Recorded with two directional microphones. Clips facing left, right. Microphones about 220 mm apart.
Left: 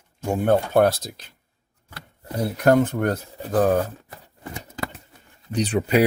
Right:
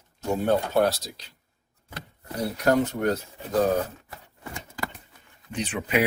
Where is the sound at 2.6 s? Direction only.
50° left (ahead or behind).